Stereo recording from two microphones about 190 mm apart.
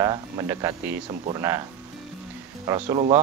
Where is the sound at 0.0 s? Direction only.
20° right (ahead or behind).